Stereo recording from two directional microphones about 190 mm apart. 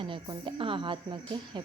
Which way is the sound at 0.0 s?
25° right (ahead or behind).